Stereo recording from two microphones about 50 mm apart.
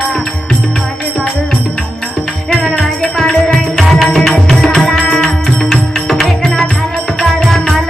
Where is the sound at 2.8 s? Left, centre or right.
Centre.